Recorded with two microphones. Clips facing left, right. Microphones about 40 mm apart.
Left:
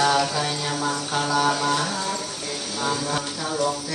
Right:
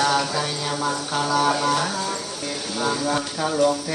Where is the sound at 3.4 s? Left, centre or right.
Centre.